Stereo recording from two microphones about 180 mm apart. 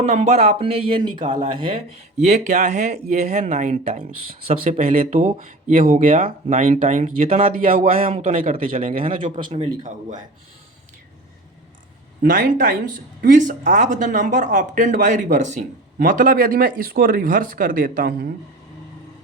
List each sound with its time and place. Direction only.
0.0 s speech: 40° right (ahead or behind)
9.0 s speech: 30° right (ahead or behind)
12.2 s speech: 50° right (ahead or behind)